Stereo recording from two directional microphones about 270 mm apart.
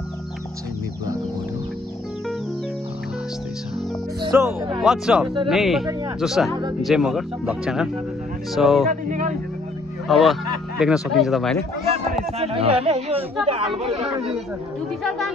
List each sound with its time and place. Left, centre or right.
4.2 s speech: centre
4.8 s speech: centre
9.0 s a sound: right
10.0 s speech: centre
11.9 s speech: right
15.0 s speech: centre